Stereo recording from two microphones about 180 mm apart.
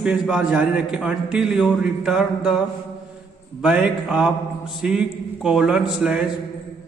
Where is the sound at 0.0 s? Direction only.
5° right (ahead or behind).